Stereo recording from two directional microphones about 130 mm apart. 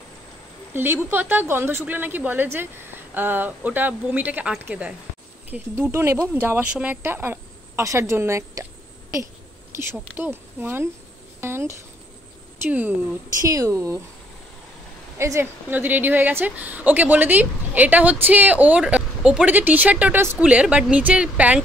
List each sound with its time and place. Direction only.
0.7 s a woman's voice: 15° right (ahead or behind)
9.8 s a woman's voice: 15° right (ahead or behind)
13.4 s speech: 25° right (ahead or behind)
15.1 s a woman's voice: 20° right (ahead or behind)